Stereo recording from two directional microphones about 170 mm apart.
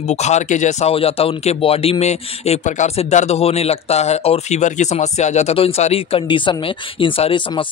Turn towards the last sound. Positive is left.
turn(degrees=30)  # may be behind; listen again after turning